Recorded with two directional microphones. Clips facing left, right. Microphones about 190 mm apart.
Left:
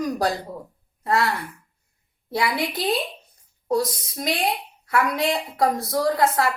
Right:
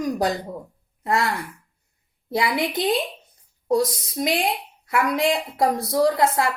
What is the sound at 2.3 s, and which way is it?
Speech, 25° right (ahead or behind).